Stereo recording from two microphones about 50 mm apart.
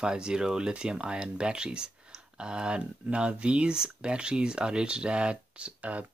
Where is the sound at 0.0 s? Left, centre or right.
Centre.